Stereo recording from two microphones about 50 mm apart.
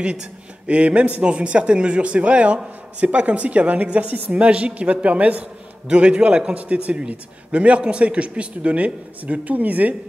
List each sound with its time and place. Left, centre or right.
0.0 s a woman's voice: centre